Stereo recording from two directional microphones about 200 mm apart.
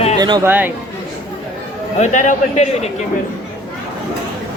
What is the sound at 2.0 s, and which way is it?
Speech, 35° left (ahead or behind).